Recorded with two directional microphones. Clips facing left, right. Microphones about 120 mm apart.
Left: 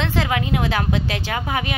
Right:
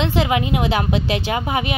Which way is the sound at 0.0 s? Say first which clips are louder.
Right 3 dB; 15° right (ahead or behind).